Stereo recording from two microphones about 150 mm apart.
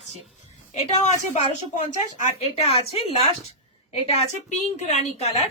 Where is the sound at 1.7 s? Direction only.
50° left (ahead or behind).